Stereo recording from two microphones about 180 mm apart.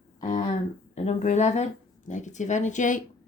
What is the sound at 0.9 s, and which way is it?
Speech, 40° left (ahead or behind).